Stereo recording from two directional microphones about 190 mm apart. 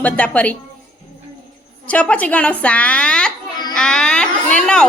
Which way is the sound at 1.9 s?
5° left (ahead or behind).